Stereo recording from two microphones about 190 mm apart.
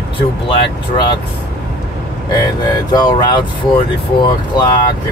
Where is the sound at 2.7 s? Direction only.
20° left (ahead or behind).